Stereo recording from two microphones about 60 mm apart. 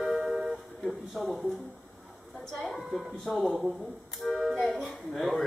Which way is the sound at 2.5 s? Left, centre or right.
Centre.